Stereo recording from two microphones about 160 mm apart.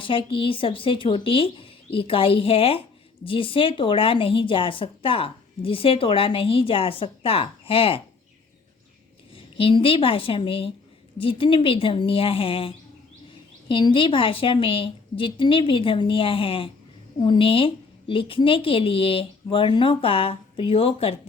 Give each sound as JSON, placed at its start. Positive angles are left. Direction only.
{"t": 0.0, "sound": "a woman's voice", "side_deg": 30}
{"t": 9.3, "sound": "a woman's voice", "side_deg": 35}